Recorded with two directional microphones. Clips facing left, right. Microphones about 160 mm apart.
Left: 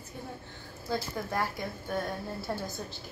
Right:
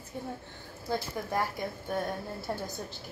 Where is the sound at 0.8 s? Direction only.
20° right (ahead or behind).